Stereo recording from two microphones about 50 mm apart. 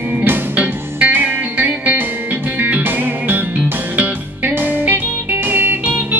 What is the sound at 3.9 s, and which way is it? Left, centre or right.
Music, right.